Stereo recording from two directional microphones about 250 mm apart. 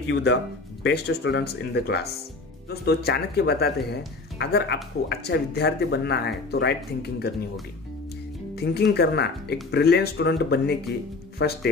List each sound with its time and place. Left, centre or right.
0.1 s speech: left
8.5 s speech: left